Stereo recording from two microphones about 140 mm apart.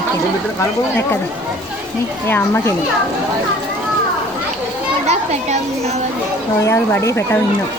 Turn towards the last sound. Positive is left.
turn(degrees=20)  # may be behind; listen again after turning